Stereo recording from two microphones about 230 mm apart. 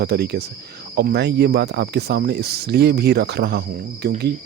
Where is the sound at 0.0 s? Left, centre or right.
Right.